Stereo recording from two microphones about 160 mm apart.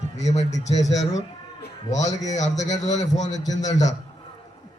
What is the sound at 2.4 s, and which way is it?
A man's voice, 45° left (ahead or behind).